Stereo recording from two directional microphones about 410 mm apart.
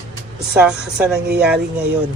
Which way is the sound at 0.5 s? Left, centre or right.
Centre.